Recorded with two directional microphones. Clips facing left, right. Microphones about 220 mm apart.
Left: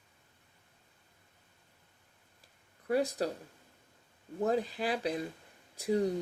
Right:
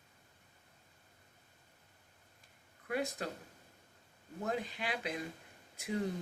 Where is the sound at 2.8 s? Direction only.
35° left (ahead or behind).